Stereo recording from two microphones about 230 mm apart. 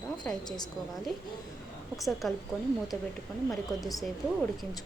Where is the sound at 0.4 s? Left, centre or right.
Centre.